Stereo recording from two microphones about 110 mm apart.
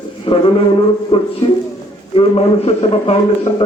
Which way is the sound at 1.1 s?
60° left (ahead or behind).